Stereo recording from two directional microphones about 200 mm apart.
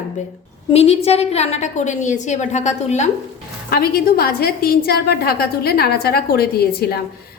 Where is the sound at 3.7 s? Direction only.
50° left (ahead or behind).